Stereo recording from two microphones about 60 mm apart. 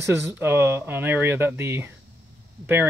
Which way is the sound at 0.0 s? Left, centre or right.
Right.